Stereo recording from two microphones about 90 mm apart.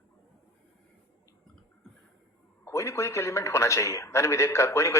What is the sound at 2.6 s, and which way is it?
A man's voice, 35° left (ahead or behind).